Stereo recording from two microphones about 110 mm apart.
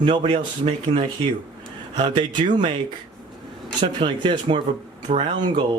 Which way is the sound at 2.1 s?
45° right (ahead or behind).